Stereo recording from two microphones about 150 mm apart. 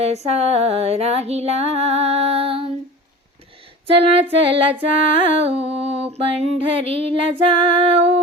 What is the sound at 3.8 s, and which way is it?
Music, 40° right (ahead or behind).